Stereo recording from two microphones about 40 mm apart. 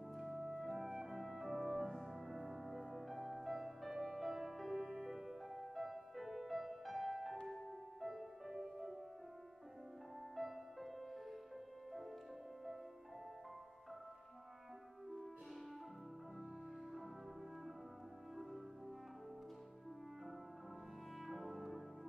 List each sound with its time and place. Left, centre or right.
0.1 s music: centre
10.3 s music: centre
21.3 s brass instrument: centre